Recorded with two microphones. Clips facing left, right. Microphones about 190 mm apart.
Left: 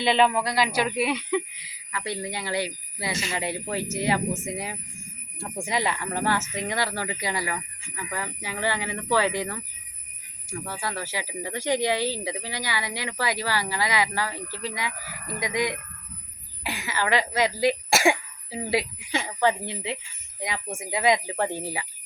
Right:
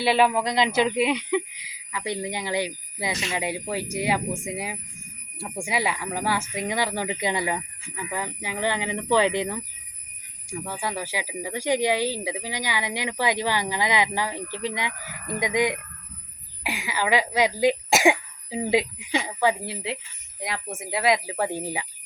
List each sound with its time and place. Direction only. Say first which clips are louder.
0.0 s speech: right 1 dB; 5° right (ahead or behind)